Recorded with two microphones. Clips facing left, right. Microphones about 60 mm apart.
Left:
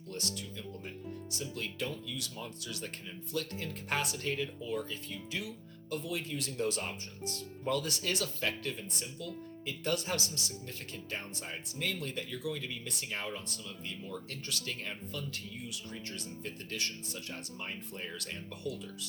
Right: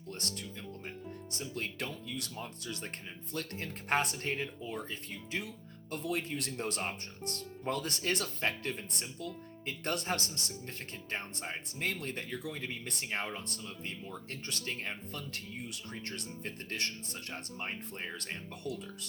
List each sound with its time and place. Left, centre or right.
0.1 s speech: right
2.3 s speech: right
15.1 s speech: right
18.6 s speech: right